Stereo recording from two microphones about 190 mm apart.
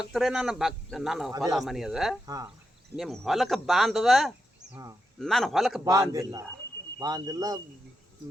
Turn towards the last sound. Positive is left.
turn(degrees=-20)  # may be behind; listen again after turning